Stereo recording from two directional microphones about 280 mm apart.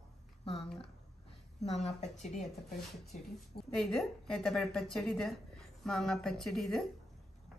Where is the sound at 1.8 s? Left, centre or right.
Left.